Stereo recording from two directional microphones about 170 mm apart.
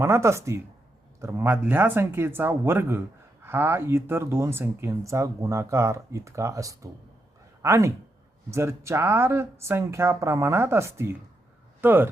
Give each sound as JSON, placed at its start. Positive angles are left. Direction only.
{"t": 0.0, "sound": "speech", "side_deg": -15}